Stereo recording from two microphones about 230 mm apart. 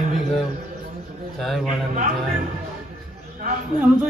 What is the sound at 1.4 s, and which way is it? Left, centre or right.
Speech, centre.